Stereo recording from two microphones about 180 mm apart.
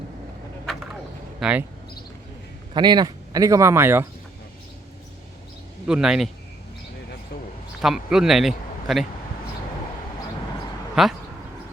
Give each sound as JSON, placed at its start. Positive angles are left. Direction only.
{"t": 1.4, "sound": "speech", "side_deg": -5}
{"t": 2.7, "sound": "speech", "side_deg": -25}
{"t": 5.8, "sound": "speech", "side_deg": -5}
{"t": 7.8, "sound": "a man's voice", "side_deg": -5}
{"t": 11.0, "sound": "speech", "side_deg": 0}